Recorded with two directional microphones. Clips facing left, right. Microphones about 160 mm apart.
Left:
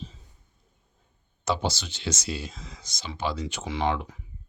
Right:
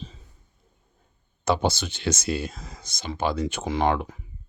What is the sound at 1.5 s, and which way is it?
Speech, 55° right (ahead or behind).